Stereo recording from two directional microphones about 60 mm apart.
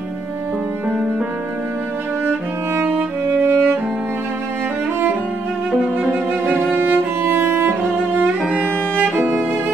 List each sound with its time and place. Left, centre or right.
2.2 s music: right
6.4 s music: right
8.9 s music: right